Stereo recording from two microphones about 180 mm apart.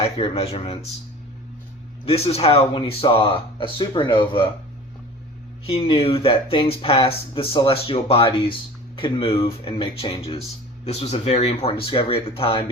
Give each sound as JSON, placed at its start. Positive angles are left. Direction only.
{"t": 0.0, "sound": "speech", "side_deg": 30}
{"t": 2.0, "sound": "speech", "side_deg": 35}
{"t": 5.6, "sound": "speech", "side_deg": 30}